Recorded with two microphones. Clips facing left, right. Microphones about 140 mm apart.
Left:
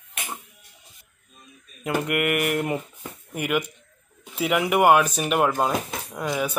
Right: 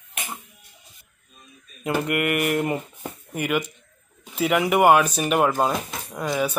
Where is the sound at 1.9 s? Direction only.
5° left (ahead or behind).